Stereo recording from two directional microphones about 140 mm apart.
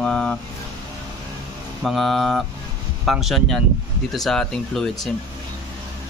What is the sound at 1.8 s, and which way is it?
A man's voice, centre (ahead or behind).